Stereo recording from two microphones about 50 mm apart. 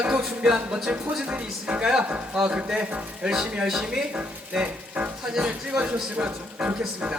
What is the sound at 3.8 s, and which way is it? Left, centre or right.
Speech, right.